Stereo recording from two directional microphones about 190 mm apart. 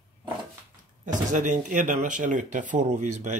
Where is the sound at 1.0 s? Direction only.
40° right (ahead or behind).